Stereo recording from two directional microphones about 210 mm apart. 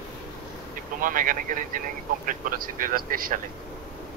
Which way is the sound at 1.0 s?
40° right (ahead or behind).